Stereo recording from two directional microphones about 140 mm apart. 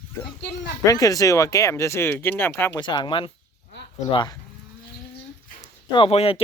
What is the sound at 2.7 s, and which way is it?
Speech, 35° left (ahead or behind).